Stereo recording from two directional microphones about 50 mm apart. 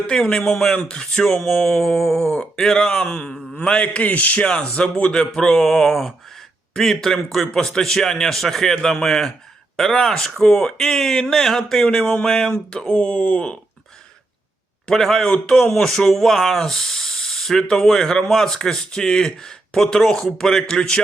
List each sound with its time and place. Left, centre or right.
0.1 s speech: centre
2.3 s speech: centre
3.8 s speech: left
4.4 s speech: centre
14.8 s speech: centre